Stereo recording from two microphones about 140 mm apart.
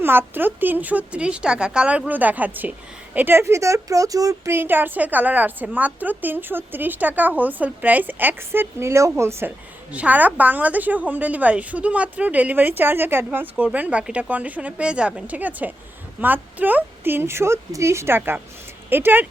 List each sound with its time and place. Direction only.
0.0 s speech: 15° right (ahead or behind)